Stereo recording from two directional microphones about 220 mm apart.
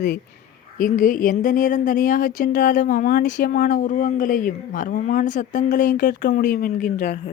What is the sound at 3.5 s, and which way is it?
A woman's voice, 35° left (ahead or behind).